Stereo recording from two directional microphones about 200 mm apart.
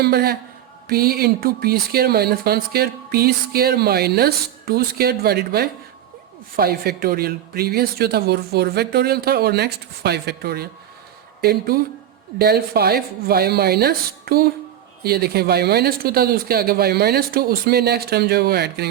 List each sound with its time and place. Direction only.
0.0 s speech: 50° right (ahead or behind)